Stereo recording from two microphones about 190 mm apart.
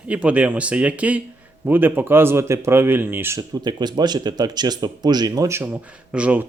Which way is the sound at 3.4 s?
20° right (ahead or behind).